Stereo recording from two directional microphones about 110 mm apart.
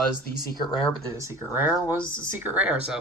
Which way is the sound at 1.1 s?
25° right (ahead or behind).